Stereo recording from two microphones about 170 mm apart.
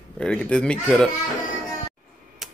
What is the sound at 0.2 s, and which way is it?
Speech, 5° left (ahead or behind).